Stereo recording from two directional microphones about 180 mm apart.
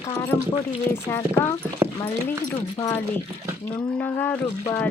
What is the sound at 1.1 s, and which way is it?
Speech, 15° left (ahead or behind).